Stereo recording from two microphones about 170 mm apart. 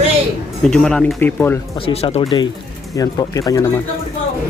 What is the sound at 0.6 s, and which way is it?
Speech, 5° left (ahead or behind).